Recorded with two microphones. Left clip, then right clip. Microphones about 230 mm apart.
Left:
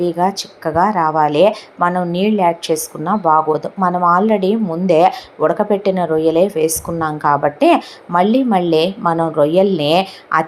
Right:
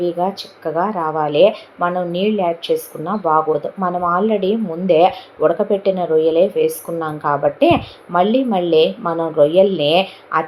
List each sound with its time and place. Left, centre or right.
0.0 s a woman's voice: left